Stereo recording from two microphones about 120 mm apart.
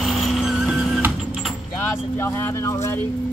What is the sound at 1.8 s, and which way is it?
Speech, 20° left (ahead or behind).